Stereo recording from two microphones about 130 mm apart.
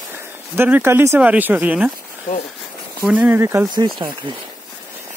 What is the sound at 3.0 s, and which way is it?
Speech, 10° right (ahead or behind).